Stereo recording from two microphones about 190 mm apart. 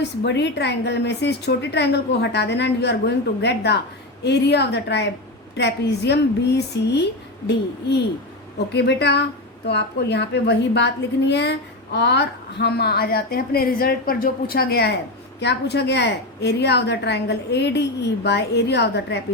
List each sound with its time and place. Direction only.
0.3 s a woman's voice: 65° left (ahead or behind)